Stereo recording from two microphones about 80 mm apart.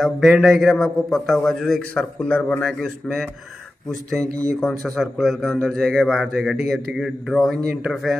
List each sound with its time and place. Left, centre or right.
0.0 s a man's voice: centre
1.8 s speech: centre
2.6 s a man's voice: centre
4.2 s speech: right
4.6 s a man's voice: centre